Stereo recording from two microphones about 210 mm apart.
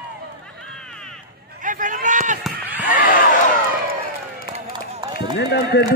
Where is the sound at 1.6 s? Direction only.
40° right (ahead or behind).